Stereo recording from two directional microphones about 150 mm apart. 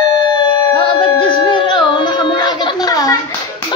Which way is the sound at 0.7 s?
35° left (ahead or behind).